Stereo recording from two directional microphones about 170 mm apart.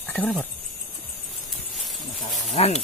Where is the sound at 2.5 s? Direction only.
40° left (ahead or behind).